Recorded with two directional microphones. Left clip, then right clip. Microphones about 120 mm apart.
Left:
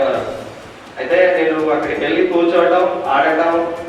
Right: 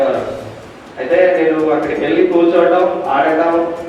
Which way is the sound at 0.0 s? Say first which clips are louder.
Right 2 dB; 25° right (ahead or behind).